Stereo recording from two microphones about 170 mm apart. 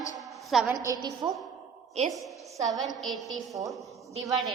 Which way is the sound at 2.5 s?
20° right (ahead or behind).